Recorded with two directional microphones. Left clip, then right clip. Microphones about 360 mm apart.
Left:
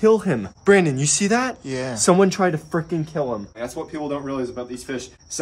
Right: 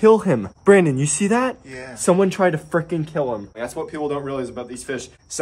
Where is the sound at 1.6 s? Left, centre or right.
Centre.